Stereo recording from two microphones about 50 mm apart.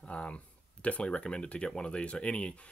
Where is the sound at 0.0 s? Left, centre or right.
Left.